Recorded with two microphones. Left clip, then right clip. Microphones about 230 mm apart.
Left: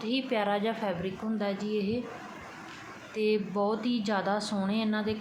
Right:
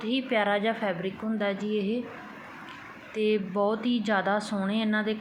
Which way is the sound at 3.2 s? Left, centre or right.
Centre.